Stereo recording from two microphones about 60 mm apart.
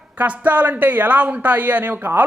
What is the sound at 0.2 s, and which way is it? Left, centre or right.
A woman's voice, right.